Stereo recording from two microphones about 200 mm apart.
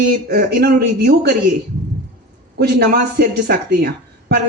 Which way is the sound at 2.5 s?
55° right (ahead or behind).